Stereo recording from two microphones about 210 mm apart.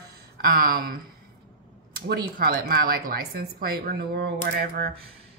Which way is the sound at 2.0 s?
50° right (ahead or behind).